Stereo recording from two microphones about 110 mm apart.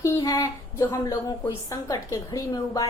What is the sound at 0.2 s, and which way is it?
A woman's voice, 30° left (ahead or behind).